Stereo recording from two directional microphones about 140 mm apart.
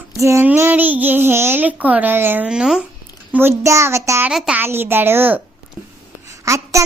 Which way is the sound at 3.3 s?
20° right (ahead or behind).